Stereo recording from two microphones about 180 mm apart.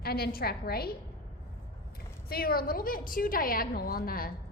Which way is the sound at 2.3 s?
55° left (ahead or behind).